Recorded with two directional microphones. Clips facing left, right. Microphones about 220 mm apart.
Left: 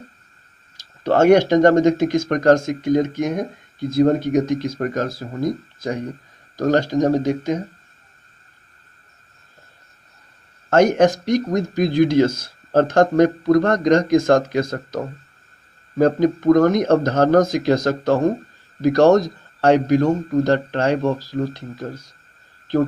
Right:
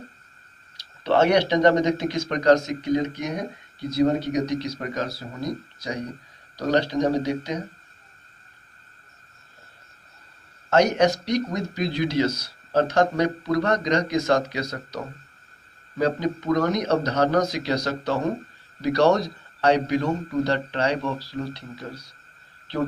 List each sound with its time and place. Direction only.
0.8 s speech: 45° left (ahead or behind)
10.7 s speech: 50° left (ahead or behind)